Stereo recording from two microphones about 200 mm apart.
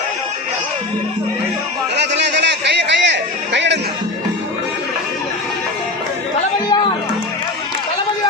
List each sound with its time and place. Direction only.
2.0 s chatter: 60° right (ahead or behind)
6.7 s music: 20° left (ahead or behind)